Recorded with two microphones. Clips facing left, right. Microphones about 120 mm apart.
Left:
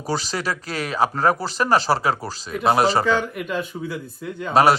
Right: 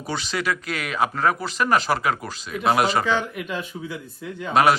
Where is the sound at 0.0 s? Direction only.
35° left (ahead or behind).